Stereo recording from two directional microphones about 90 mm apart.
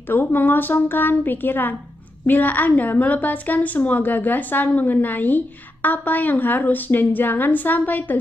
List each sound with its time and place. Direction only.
0.1 s a woman's voice: 20° left (ahead or behind)